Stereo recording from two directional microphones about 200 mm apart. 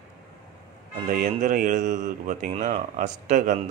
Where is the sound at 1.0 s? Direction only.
40° right (ahead or behind).